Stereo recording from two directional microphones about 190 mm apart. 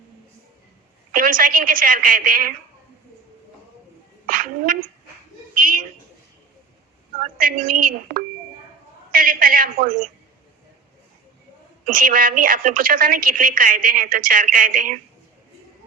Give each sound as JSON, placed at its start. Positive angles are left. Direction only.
{"t": 1.1, "sound": "a woman's voice", "side_deg": -45}
{"t": 4.3, "sound": "speech", "side_deg": -45}
{"t": 5.5, "sound": "a sound", "side_deg": -45}
{"t": 7.2, "sound": "a woman's voice", "side_deg": -45}
{"t": 11.9, "sound": "a woman's voice", "side_deg": -50}